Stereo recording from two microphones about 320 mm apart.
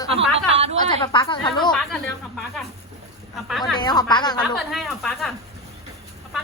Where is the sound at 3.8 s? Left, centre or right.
Centre.